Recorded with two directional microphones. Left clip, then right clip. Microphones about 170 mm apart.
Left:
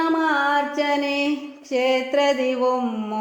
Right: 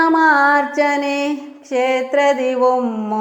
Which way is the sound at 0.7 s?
5° right (ahead or behind).